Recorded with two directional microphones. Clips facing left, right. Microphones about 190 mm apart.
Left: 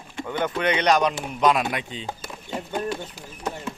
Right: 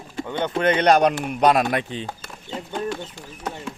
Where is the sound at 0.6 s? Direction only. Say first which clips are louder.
Right 4 dB; 50° right (ahead or behind).